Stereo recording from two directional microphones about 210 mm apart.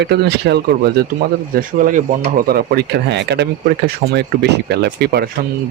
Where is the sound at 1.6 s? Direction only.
40° right (ahead or behind).